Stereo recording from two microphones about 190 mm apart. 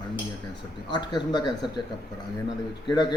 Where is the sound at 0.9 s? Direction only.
25° left (ahead or behind).